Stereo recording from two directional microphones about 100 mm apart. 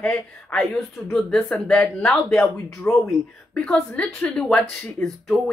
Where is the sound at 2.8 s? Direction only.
30° left (ahead or behind).